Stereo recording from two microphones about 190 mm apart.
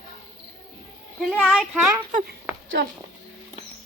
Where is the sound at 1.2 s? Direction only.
Centre (ahead or behind).